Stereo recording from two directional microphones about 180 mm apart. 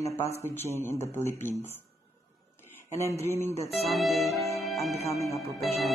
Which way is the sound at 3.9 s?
Centre (ahead or behind).